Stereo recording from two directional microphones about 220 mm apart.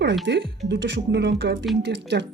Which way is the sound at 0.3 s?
55° right (ahead or behind).